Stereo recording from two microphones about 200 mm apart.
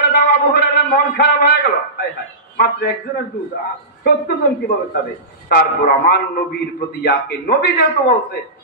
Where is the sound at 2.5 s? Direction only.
45° left (ahead or behind).